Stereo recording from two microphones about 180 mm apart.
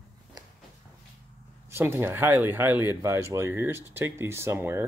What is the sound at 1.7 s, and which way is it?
Speech, 15° right (ahead or behind).